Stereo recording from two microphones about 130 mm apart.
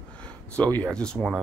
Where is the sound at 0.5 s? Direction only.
10° left (ahead or behind).